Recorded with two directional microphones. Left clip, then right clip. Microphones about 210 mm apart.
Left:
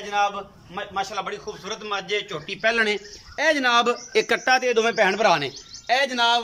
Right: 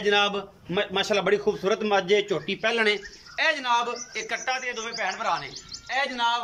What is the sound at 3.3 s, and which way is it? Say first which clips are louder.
Speech: left 4 dB; 35° left (ahead or behind).